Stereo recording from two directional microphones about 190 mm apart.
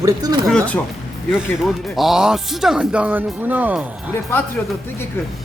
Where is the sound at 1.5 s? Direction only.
Centre (ahead or behind).